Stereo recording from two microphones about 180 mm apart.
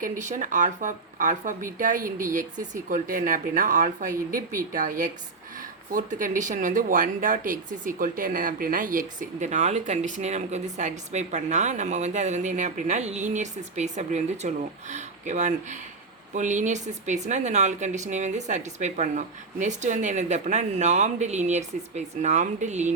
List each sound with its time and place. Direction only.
0.0 s speech: 45° right (ahead or behind)